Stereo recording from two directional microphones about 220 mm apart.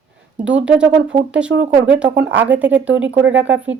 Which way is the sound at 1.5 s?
50° right (ahead or behind).